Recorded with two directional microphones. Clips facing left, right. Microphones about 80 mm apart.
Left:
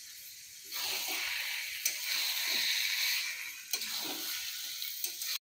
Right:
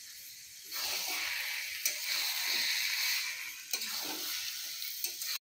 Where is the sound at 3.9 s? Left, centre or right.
Centre.